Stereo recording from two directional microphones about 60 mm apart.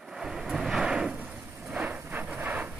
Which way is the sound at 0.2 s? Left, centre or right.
Centre.